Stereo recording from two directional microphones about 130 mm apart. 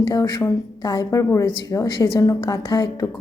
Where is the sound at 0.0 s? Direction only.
35° left (ahead or behind).